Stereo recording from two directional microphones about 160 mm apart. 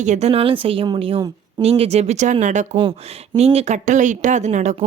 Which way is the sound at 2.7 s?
35° right (ahead or behind).